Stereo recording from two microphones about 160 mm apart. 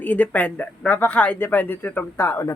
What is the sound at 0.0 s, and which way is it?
Speech, 10° left (ahead or behind).